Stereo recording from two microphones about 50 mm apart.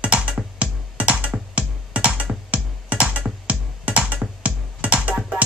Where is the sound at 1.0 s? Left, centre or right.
Right.